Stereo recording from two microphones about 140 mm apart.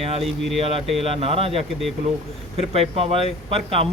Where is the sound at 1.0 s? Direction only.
45° right (ahead or behind).